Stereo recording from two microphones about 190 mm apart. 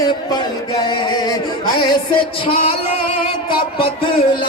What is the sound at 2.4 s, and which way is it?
Speech, 30° left (ahead or behind).